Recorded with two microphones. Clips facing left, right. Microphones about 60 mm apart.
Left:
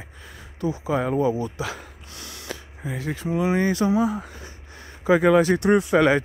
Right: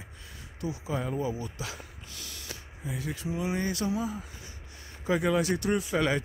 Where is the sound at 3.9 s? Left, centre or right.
Left.